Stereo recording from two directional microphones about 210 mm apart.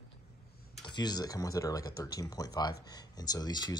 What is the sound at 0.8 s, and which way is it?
Speech, 20° left (ahead or behind).